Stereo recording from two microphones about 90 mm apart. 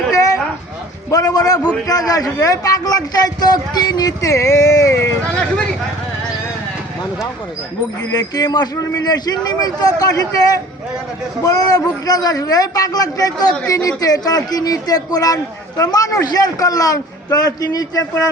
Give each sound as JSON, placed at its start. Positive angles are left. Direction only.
{"t": 0.1, "sound": "dog", "side_deg": 40}
{"t": 1.1, "sound": "a man's voice", "side_deg": 45}
{"t": 5.3, "sound": "speech", "side_deg": 10}
{"t": 8.1, "sound": "a man's voice", "side_deg": 45}